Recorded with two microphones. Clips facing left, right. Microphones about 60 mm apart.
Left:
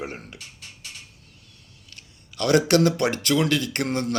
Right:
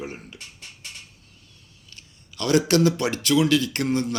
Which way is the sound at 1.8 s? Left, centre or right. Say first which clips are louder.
Even; left.